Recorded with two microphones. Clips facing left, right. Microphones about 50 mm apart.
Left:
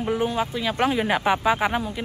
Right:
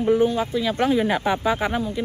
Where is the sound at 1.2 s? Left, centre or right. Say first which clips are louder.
Left 1 dB; left.